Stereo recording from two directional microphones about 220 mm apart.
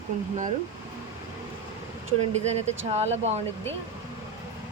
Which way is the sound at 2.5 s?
30° right (ahead or behind).